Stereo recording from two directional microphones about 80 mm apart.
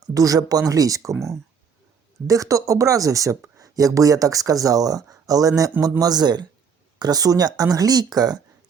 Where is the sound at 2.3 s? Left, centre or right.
Right.